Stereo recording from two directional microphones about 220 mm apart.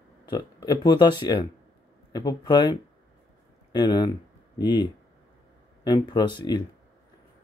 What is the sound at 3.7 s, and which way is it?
Speech, 20° left (ahead or behind).